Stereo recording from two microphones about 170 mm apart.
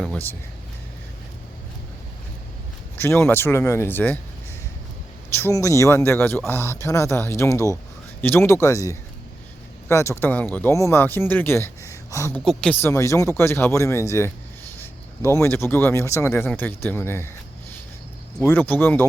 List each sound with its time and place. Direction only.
0.0 s speech: 10° left (ahead or behind)
3.0 s speech: 15° left (ahead or behind)
5.3 s speech: 15° left (ahead or behind)
12.5 s speech: 5° left (ahead or behind)
12.8 s speech: 15° left (ahead or behind)
18.4 s speech: 10° left (ahead or behind)